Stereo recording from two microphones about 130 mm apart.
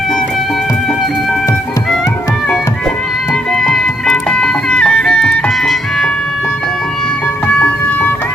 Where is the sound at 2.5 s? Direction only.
5° left (ahead or behind).